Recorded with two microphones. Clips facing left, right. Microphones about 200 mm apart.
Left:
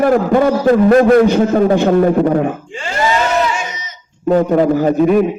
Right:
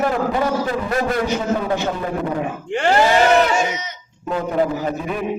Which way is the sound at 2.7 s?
65° right (ahead or behind).